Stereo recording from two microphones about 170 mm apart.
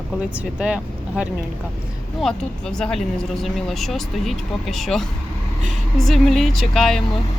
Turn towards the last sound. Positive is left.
turn(degrees=0)  # may be behind; listen again after turning